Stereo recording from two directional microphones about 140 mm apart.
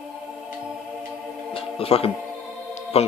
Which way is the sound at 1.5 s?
45° left (ahead or behind).